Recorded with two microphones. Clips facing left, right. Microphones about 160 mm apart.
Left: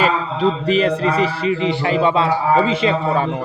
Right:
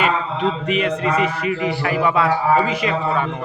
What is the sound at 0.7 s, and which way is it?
Speech, 35° left (ahead or behind).